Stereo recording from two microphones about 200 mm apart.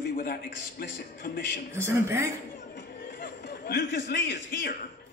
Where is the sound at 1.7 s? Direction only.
15° right (ahead or behind).